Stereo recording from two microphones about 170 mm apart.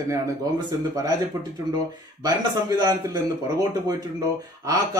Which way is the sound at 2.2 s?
20° right (ahead or behind).